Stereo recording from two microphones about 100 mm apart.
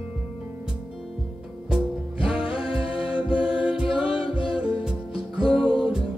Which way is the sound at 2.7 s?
65° left (ahead or behind).